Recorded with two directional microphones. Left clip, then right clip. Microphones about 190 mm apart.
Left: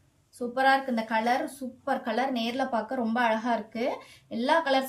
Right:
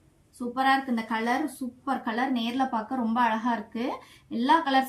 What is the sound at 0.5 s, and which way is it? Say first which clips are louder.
A woman's voice: left 1 dB; 60° left (ahead or behind).